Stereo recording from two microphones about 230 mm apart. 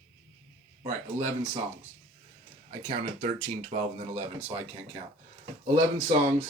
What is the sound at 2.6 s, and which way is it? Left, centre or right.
Speech, right.